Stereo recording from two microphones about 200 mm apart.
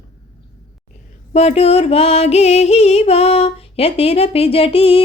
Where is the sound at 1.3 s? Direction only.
30° left (ahead or behind).